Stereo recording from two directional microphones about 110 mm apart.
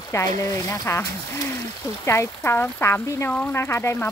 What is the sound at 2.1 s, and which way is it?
Speech, 20° left (ahead or behind).